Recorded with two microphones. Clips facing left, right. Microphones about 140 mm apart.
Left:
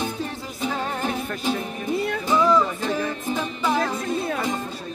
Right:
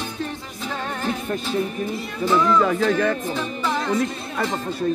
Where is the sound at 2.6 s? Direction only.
90° right.